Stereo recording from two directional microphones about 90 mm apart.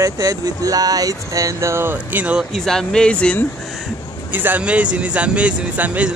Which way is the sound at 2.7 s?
5° left (ahead or behind).